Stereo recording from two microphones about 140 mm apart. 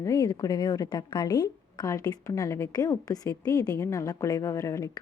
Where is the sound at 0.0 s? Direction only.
25° left (ahead or behind).